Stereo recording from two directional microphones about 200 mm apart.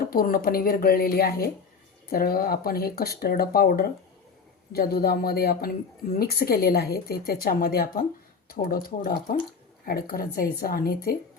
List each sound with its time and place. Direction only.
0.0 s speech: 45° left (ahead or behind)